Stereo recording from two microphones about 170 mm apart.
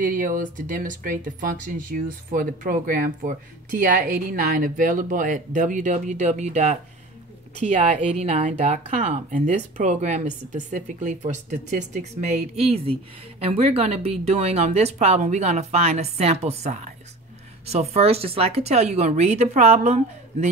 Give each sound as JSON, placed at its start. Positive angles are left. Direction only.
{"t": 0.0, "sound": "speech", "side_deg": -50}